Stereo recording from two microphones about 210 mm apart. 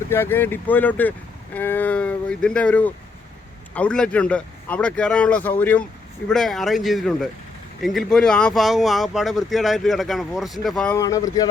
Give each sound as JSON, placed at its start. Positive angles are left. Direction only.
{"t": 0.1, "sound": "speech", "side_deg": 10}
{"t": 10.9, "sound": "speech", "side_deg": 15}